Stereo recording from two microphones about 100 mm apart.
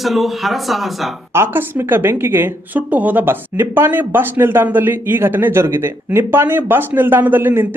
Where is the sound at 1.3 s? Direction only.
25° right (ahead or behind).